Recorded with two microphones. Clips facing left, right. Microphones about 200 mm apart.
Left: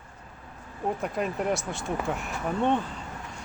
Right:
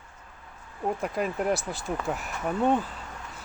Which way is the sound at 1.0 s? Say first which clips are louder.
Right 1 dB; centre (ahead or behind).